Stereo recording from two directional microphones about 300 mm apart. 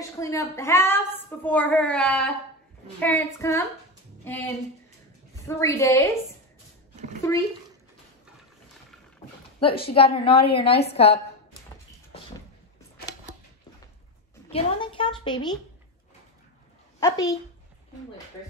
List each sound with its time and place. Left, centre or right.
0.2 s a woman's voice: centre
9.6 s a woman's voice: centre
14.5 s a woman's voice: centre
17.0 s a woman's voice: centre